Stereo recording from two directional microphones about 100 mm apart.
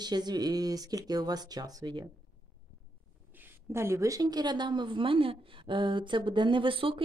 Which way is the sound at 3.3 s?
25° right (ahead or behind).